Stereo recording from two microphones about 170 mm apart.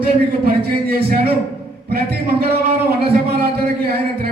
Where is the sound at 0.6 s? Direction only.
65° right (ahead or behind).